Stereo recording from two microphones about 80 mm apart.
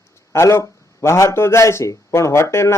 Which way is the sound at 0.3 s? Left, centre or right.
Left.